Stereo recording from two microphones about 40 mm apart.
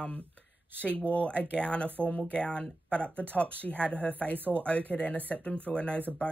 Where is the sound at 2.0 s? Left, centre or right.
Left.